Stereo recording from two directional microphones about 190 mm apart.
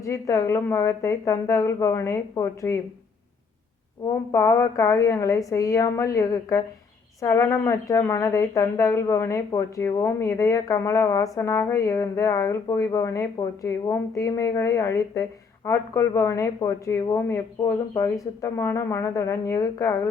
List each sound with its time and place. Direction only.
0.0 s speech: 15° left (ahead or behind)
4.3 s speech: 15° left (ahead or behind)